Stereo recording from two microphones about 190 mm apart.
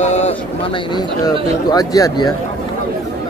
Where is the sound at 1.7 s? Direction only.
20° left (ahead or behind).